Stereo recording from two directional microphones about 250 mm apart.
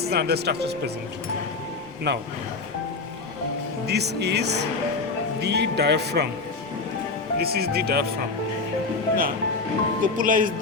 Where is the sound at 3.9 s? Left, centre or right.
Right.